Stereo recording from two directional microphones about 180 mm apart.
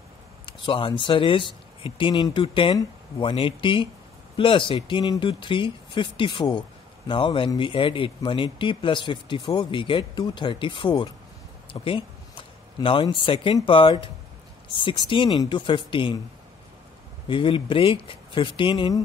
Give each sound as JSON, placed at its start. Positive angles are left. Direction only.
{"t": 0.5, "sound": "speech", "side_deg": 30}
{"t": 17.3, "sound": "speech", "side_deg": 30}